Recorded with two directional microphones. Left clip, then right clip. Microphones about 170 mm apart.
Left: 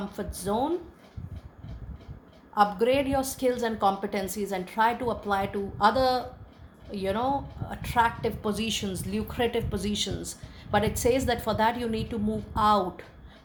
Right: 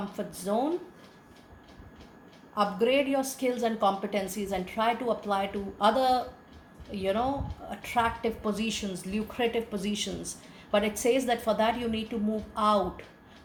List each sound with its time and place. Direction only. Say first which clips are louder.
0.1 s a woman's voice: even; 45° left (ahead or behind)
2.6 s a woman's voice: left 2 dB; 50° left (ahead or behind)